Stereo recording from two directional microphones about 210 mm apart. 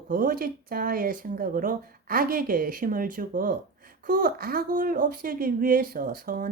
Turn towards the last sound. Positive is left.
turn(degrees=-45)  # may be behind; listen again after turning